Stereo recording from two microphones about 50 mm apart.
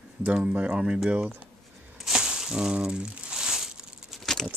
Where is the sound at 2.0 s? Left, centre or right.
Centre.